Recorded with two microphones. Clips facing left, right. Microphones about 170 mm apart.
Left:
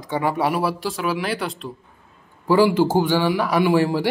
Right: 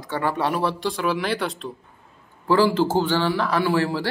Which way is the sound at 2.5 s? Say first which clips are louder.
Left 2 dB; 15° left (ahead or behind).